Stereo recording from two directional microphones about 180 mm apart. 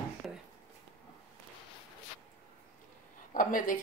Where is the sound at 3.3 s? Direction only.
50° left (ahead or behind).